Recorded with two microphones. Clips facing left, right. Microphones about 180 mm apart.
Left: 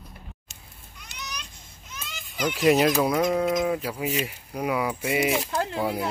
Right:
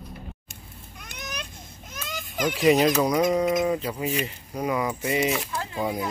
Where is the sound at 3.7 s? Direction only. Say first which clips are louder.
Right 1 dB; 5° left (ahead or behind).